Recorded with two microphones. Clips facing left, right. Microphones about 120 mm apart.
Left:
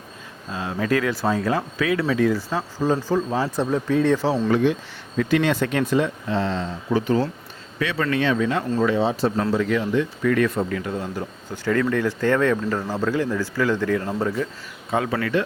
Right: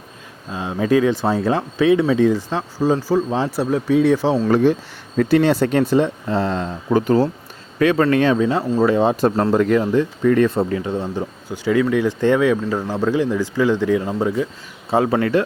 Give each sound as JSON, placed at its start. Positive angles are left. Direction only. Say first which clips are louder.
{"t": 0.5, "sound": "speech", "louder": "right 5 dB", "side_deg": -20}
{"t": 4.4, "sound": "speech", "louder": "right 4 dB", "side_deg": -40}
{"t": 8.4, "sound": "speech", "louder": "right 4 dB", "side_deg": -30}
{"t": 8.8, "sound": "speech", "louder": "right 5 dB", "side_deg": -45}
{"t": 11.4, "sound": "speech", "louder": "right 4 dB", "side_deg": -15}
{"t": 14.8, "sound": "speech", "louder": "right 6 dB", "side_deg": -30}